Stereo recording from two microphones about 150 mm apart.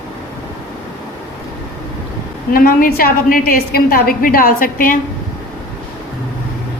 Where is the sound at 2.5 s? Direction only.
70° left (ahead or behind).